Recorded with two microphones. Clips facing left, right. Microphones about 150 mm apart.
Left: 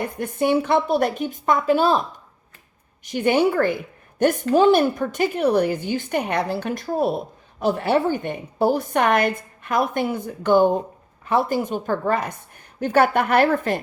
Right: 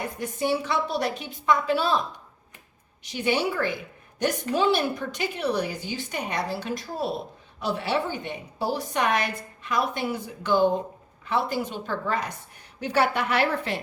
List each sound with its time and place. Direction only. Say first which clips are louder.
0.2 s a woman's voice: left 6 dB; 55° left (ahead or behind)